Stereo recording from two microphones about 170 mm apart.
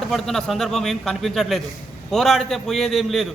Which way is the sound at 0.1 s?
Centre (ahead or behind).